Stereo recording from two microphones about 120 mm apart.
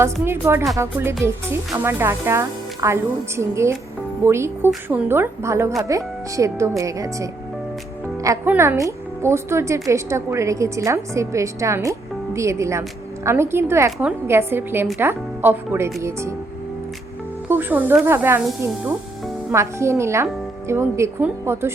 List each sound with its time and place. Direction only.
0.0 s speech: 20° right (ahead or behind)
8.4 s speech: 20° right (ahead or behind)
17.5 s speech: 15° right (ahead or behind)